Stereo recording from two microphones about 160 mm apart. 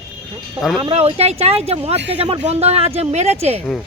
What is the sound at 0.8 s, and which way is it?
Speech, 35° right (ahead or behind).